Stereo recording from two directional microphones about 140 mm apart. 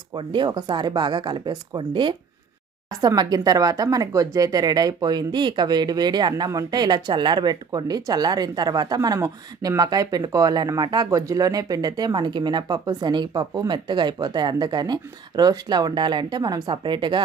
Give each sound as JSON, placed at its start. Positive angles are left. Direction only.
{"t": 0.1, "sound": "speech", "side_deg": -30}